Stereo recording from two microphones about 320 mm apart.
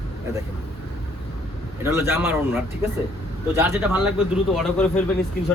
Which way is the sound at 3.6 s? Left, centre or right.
Centre.